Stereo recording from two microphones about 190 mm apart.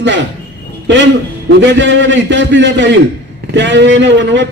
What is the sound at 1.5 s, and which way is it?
Speech, 70° right (ahead or behind).